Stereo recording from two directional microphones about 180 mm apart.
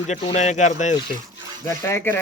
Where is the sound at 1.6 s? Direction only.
15° left (ahead or behind).